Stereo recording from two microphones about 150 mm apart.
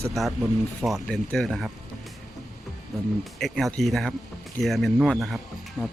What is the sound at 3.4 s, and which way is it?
Speech, centre (ahead or behind).